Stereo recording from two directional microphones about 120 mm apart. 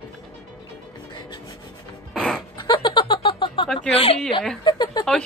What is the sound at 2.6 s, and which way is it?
Music, 35° left (ahead or behind).